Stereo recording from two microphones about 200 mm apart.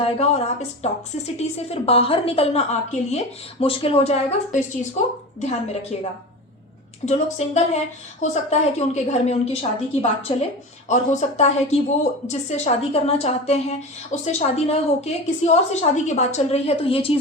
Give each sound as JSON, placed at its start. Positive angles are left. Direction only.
{"t": 0.0, "sound": "a woman's voice", "side_deg": 30}